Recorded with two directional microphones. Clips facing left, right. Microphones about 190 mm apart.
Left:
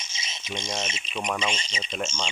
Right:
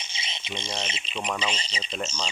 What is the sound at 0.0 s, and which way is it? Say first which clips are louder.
Bird: right 2 dB; 30° right (ahead or behind).